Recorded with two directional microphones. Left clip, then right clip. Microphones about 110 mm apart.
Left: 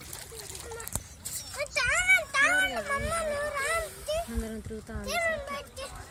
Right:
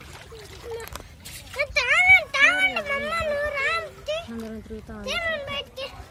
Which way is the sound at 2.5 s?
35° right (ahead or behind).